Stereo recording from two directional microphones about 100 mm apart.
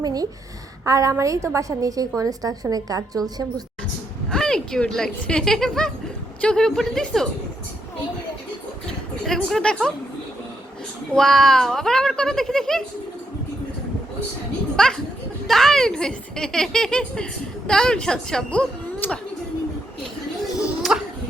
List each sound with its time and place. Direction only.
0.0 s a woman's voice: 40° right (ahead or behind)
4.3 s speech: 5° left (ahead or behind)
9.2 s speech: 5° left (ahead or behind)
11.1 s speech: 5° left (ahead or behind)
14.8 s a woman's voice: 5° left (ahead or behind)
18.9 s speech: 20° left (ahead or behind)
20.8 s music: centre (ahead or behind)